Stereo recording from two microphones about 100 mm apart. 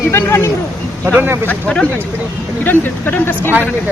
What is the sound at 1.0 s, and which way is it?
Speech, 20° right (ahead or behind).